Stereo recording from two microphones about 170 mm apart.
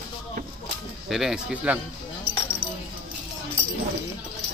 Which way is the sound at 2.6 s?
65° right (ahead or behind).